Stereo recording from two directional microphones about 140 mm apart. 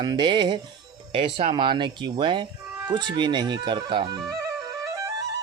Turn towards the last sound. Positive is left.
turn(degrees=-35)  # may be behind; listen again after turning